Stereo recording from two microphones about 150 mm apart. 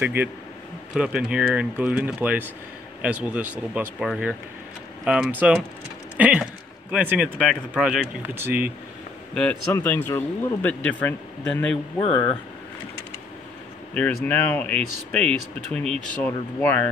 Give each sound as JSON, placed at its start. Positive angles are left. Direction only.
{"t": 0.0, "sound": "speech", "side_deg": -10}
{"t": 9.3, "sound": "speech", "side_deg": 5}
{"t": 12.0, "sound": "speech", "side_deg": 30}
{"t": 14.2, "sound": "speech", "side_deg": 10}